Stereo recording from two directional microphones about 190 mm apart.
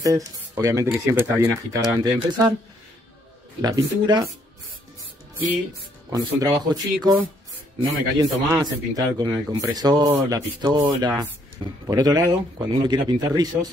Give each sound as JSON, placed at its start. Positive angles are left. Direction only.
{"t": 0.0, "sound": "speech", "side_deg": -15}
{"t": 3.6, "sound": "speech", "side_deg": -20}
{"t": 6.0, "sound": "speech", "side_deg": -20}
{"t": 8.2, "sound": "speech", "side_deg": -20}
{"t": 10.1, "sound": "speech", "side_deg": -10}
{"t": 10.6, "sound": "speech", "side_deg": -20}